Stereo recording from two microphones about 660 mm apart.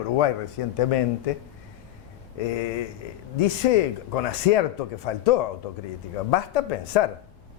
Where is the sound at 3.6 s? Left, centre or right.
Left.